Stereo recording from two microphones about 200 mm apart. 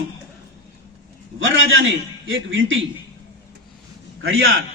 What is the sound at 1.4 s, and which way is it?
A man's voice, 75° right (ahead or behind).